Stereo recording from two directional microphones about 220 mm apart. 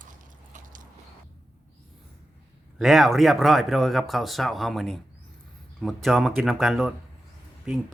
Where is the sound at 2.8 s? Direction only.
Centre (ahead or behind).